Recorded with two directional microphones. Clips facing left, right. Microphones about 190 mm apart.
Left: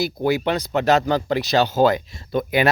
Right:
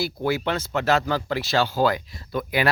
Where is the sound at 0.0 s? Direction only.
15° left (ahead or behind).